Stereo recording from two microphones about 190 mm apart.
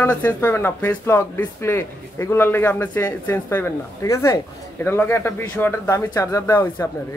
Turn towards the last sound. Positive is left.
turn(degrees=15)  # may be behind; listen again after turning